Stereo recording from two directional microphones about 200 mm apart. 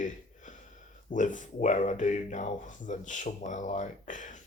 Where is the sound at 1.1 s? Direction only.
40° left (ahead or behind).